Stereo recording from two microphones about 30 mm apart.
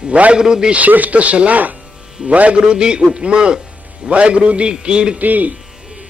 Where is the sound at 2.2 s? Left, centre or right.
Right.